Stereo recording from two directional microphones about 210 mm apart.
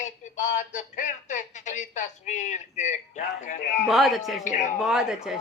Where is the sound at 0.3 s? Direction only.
35° left (ahead or behind).